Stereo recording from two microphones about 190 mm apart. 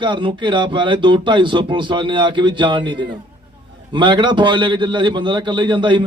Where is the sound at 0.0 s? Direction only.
25° right (ahead or behind).